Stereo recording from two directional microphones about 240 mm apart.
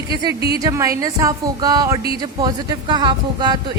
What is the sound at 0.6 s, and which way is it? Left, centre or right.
Speech, centre.